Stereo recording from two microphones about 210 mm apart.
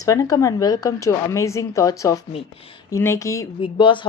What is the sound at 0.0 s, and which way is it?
Speech, 15° left (ahead or behind).